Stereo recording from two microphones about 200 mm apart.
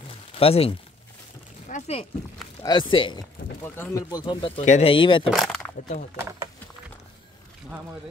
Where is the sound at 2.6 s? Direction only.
25° left (ahead or behind).